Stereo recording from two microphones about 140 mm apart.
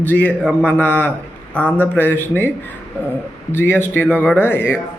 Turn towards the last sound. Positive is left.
turn(degrees=15)  # may be behind; listen again after turning